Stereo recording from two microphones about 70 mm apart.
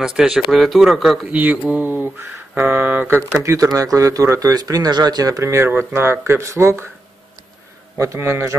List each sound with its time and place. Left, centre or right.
0.0 s speech: centre
1.2 s a sound: right
3.4 s speech: right
5.4 s speech: right
5.7 s speech: right
8.0 s speech: right